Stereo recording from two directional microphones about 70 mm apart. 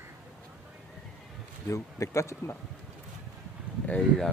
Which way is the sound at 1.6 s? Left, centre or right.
Left.